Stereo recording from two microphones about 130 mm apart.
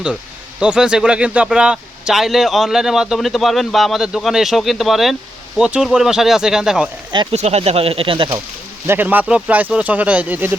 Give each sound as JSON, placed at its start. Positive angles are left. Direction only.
{"t": 0.6, "sound": "speech", "side_deg": -10}
{"t": 7.3, "sound": "speech", "side_deg": -55}
{"t": 8.9, "sound": "speech", "side_deg": -15}